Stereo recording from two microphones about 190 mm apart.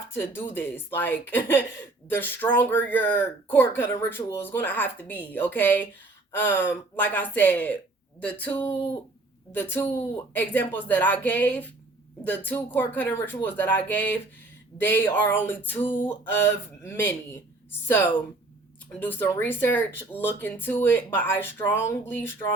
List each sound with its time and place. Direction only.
0.1 s speech: 10° left (ahead or behind)
15.8 s a sound: 25° left (ahead or behind)
16.4 s speech: 10° left (ahead or behind)